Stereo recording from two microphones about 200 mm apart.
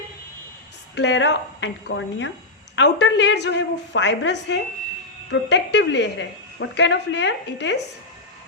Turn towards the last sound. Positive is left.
turn(degrees=60)  # may be behind; listen again after turning